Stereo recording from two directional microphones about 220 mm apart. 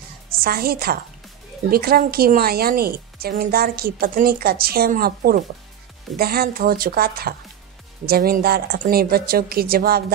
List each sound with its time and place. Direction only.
0.4 s a woman's voice: 45° right (ahead or behind)